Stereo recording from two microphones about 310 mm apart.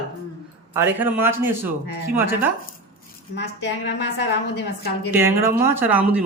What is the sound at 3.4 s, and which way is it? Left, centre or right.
Speech, left.